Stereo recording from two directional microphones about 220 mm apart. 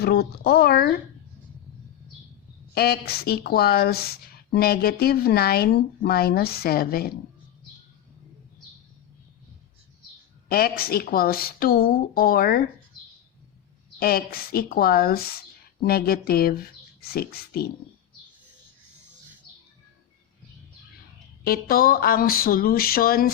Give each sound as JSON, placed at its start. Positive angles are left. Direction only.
{"t": 0.0, "sound": "speech", "side_deg": 45}
{"t": 2.7, "sound": "speech", "side_deg": 45}
{"t": 10.5, "sound": "speech", "side_deg": 45}
{"t": 14.0, "sound": "speech", "side_deg": 45}
{"t": 21.4, "sound": "a sound", "side_deg": 40}